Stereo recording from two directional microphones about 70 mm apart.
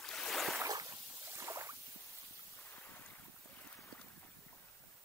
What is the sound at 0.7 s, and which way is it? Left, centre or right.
Boat, right.